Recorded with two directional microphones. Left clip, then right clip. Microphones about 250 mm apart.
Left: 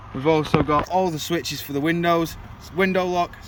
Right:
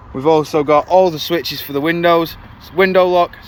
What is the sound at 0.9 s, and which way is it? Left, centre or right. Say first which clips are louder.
Speech: right 10 dB; centre.